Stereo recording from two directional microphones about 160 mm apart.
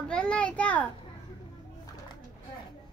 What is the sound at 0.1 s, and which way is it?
Speech, 5° left (ahead or behind).